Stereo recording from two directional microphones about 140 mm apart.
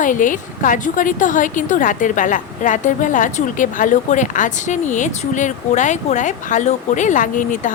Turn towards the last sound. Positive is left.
turn(degrees=70)  # may be behind; listen again after turning